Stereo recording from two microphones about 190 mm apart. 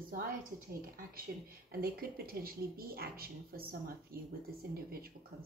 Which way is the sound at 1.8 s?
50° right (ahead or behind).